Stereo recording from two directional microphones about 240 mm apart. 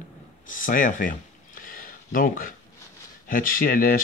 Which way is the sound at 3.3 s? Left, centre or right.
Left.